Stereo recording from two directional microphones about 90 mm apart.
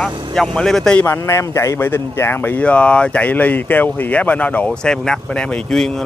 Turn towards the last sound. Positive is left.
turn(degrees=5)  # may be behind; listen again after turning